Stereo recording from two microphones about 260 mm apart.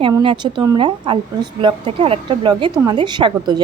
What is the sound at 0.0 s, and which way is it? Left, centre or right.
A woman's voice, centre.